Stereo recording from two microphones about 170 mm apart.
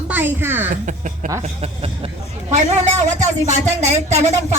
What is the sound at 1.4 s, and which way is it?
Speech, 40° right (ahead or behind).